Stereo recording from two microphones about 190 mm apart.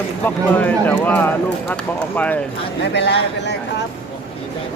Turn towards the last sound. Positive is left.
turn(degrees=65)  # may be behind; listen again after turning